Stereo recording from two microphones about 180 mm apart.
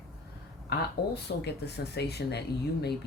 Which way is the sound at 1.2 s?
65° left (ahead or behind).